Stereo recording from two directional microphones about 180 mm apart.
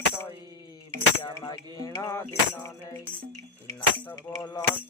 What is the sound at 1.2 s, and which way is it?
Music, 20° left (ahead or behind).